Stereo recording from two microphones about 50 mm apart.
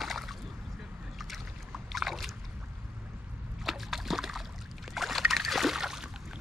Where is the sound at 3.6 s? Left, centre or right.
Centre.